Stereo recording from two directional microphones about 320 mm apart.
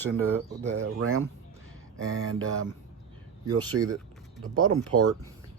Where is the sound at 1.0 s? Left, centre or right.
Right.